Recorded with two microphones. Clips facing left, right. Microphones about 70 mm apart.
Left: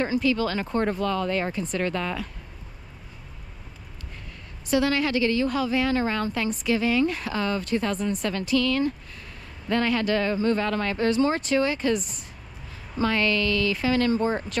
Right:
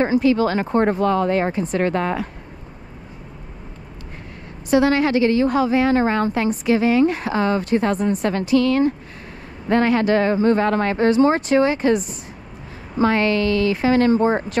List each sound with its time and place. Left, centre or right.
0.0 s a woman's voice: right
4.6 s a woman's voice: right